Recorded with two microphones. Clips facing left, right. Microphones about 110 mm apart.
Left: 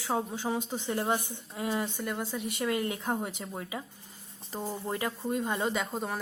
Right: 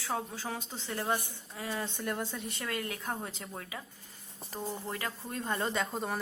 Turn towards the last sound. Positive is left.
turn(degrees=0)  # may be behind; listen again after turning